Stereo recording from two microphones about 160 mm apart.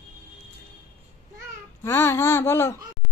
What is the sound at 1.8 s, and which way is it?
Speech, 15° left (ahead or behind).